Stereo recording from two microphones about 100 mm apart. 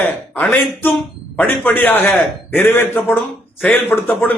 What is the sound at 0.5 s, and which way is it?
A man's voice, 20° left (ahead or behind).